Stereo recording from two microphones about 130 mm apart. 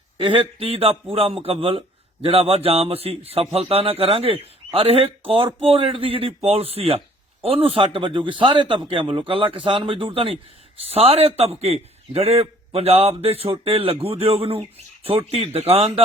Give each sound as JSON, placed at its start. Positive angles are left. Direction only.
{"t": 0.2, "sound": "a man's voice", "side_deg": -45}